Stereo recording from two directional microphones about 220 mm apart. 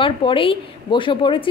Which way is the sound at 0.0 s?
25° left (ahead or behind).